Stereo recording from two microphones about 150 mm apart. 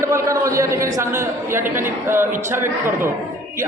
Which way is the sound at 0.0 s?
20° right (ahead or behind).